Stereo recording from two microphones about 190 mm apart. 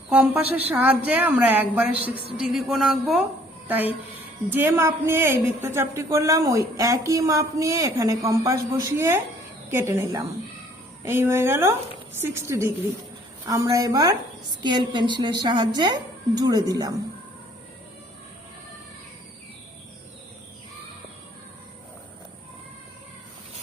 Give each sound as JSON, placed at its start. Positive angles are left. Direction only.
{"t": 0.1, "sound": "a woman's voice", "side_deg": -10}